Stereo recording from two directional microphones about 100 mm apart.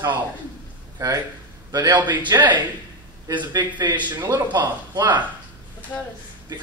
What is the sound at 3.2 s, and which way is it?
Speech, 45° right (ahead or behind).